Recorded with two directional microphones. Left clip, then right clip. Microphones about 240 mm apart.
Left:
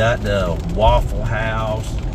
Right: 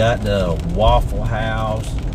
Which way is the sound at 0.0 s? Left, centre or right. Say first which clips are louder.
Even; right.